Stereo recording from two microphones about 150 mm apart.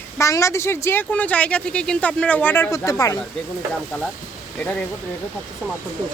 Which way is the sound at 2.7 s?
20° left (ahead or behind).